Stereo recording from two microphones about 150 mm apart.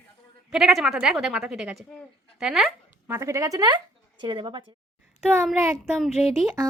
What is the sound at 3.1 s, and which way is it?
Speech, 20° right (ahead or behind).